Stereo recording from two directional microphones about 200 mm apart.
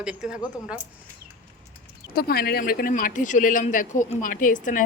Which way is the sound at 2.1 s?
50° left (ahead or behind).